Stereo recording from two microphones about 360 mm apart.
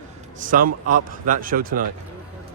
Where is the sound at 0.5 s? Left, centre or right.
Right.